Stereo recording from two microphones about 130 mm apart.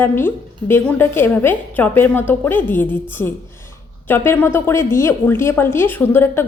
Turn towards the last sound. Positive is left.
turn(degrees=15)  # may be behind; listen again after turning